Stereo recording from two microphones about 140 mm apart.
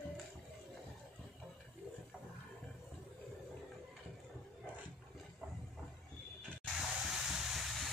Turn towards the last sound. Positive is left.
turn(degrees=0)  # may be behind; listen again after turning